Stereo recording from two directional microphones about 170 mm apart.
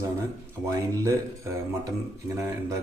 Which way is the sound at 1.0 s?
15° right (ahead or behind).